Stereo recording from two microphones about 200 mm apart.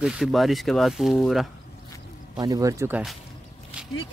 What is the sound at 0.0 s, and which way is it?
Speech, centre (ahead or behind).